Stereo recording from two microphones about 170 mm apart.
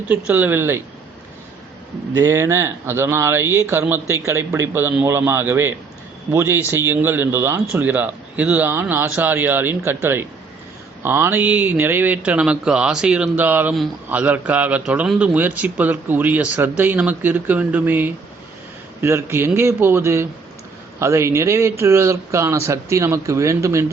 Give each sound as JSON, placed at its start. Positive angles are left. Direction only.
{"t": 0.1, "sound": "a man's voice", "side_deg": -10}
{"t": 2.1, "sound": "a man's voice", "side_deg": -20}